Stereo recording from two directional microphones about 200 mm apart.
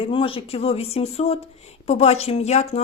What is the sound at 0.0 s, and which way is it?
Speech, 25° left (ahead or behind).